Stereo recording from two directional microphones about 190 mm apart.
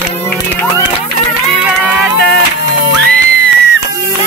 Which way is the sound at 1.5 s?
10° right (ahead or behind).